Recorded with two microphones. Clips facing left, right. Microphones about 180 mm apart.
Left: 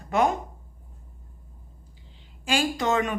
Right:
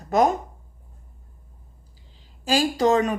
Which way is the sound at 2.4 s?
35° right (ahead or behind).